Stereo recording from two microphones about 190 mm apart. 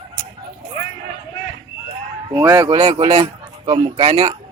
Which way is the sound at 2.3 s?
20° right (ahead or behind).